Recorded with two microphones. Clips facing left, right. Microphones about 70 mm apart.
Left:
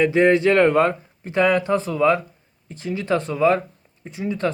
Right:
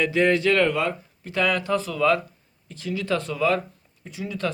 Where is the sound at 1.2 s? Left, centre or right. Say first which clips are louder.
Left 6 dB; left.